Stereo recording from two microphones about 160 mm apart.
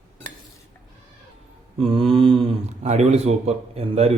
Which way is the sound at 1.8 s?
35° right (ahead or behind).